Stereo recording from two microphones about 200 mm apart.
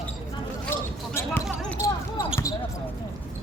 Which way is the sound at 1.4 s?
Centre (ahead or behind).